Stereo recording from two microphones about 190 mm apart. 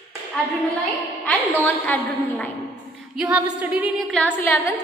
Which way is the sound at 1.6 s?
10° left (ahead or behind).